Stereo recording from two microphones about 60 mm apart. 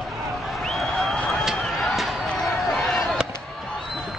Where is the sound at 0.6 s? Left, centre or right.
Centre.